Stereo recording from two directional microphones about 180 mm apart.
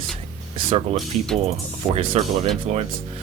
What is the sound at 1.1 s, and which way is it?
Speech, 40° right (ahead or behind).